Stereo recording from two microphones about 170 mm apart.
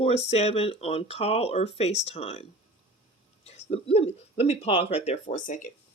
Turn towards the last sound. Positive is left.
turn(degrees=50)  # may be behind; listen again after turning